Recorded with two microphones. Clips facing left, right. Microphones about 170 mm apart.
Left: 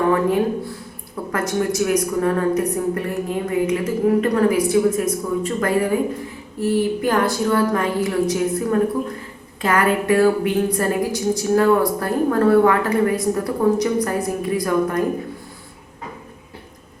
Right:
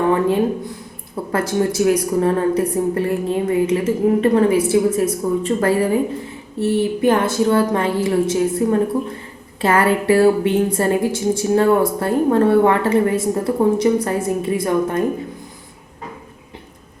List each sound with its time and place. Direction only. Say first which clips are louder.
0.1 s a woman's voice: right 1 dB; 25° right (ahead or behind)